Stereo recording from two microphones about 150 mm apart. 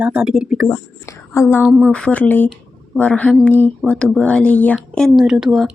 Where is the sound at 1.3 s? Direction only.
15° left (ahead or behind); by 5.5 s 5° right (ahead or behind).